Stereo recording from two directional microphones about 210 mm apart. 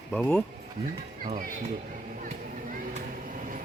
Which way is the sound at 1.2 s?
40° right (ahead or behind).